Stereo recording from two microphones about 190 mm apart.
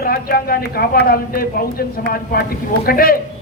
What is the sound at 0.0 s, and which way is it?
A man's voice, 55° left (ahead or behind).